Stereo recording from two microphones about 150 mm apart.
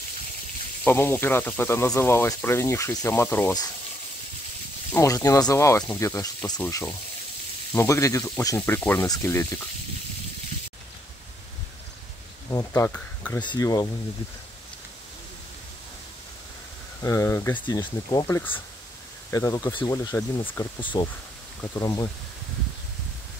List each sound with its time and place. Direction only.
0.8 s speech: 15° left (ahead or behind)
4.9 s speech: 20° left (ahead or behind)
12.4 s speech: 20° left (ahead or behind)
13.4 s speech: 25° left (ahead or behind)
17.0 s speech: 20° left (ahead or behind)
17.6 s speech: 30° left (ahead or behind)
18.2 s speech: 15° left (ahead or behind)